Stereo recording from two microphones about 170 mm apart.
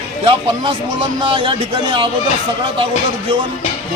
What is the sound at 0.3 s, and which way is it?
Speech, 30° right (ahead or behind).